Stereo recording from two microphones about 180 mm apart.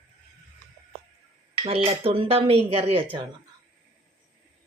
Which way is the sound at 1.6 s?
35° right (ahead or behind).